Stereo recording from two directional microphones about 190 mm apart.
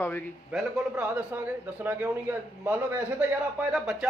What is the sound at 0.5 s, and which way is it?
A man's voice, 10° right (ahead or behind).